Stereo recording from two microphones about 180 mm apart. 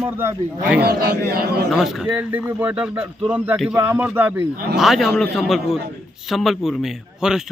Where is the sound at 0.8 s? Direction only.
60° right (ahead or behind).